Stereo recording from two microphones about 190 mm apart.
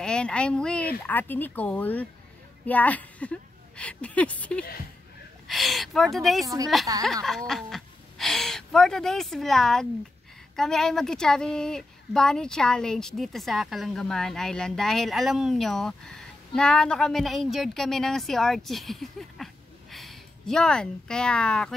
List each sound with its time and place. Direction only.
0.0 s a woman's voice: 5° left (ahead or behind)
6.4 s a woman's voice: 15° right (ahead or behind)
7.2 s a woman's voice: centre (ahead or behind)